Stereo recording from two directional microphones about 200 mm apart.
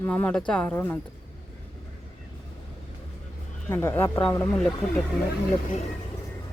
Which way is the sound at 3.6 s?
10° left (ahead or behind).